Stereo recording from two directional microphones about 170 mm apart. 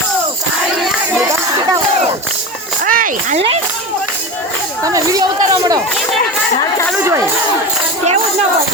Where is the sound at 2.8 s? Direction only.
55° right (ahead or behind).